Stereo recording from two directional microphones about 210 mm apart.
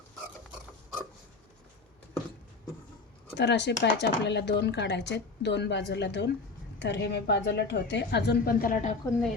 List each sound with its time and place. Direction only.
3.3 s a woman's voice: 55° left (ahead or behind); by 9.0 s 35° left (ahead or behind)